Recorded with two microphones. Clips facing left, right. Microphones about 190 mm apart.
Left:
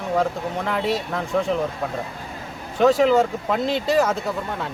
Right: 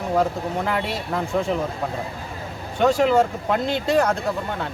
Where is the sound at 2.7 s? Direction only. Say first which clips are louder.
Left 1 dB; centre (ahead or behind).